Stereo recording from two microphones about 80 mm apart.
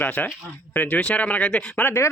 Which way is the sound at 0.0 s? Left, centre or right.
Left.